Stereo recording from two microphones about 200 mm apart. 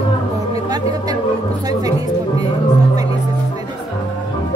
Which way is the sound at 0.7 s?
20° right (ahead or behind).